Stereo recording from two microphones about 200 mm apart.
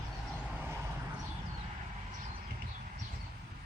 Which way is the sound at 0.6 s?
10° right (ahead or behind).